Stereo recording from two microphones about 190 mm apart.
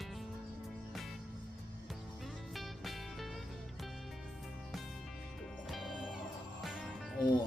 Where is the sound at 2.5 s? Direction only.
Centre (ahead or behind).